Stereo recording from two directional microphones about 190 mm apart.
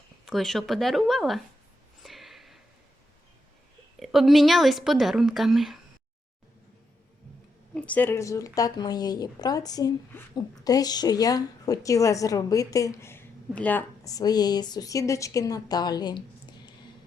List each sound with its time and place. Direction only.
0.3 s a woman's voice: centre (ahead or behind)
2.0 s a sound: centre (ahead or behind)
4.0 s a woman's voice: centre (ahead or behind)
7.8 s speech: 10° left (ahead or behind)